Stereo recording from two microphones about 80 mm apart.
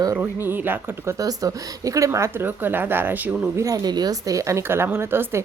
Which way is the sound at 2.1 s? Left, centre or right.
Right.